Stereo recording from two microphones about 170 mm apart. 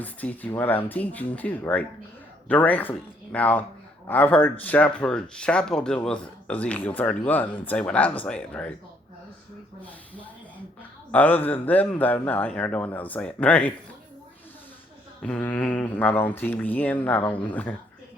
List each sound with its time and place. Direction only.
0.0 s speech: 10° left (ahead or behind)
11.1 s speech: 10° left (ahead or behind)
15.2 s speech: 10° left (ahead or behind)